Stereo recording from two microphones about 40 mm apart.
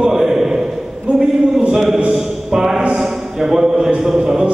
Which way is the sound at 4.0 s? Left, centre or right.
Centre.